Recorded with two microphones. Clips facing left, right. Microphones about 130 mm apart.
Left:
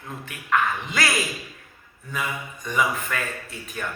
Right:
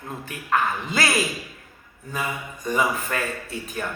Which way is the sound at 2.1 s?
35° right (ahead or behind).